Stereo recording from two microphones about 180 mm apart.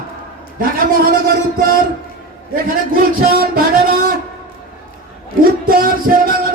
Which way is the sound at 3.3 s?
55° right (ahead or behind).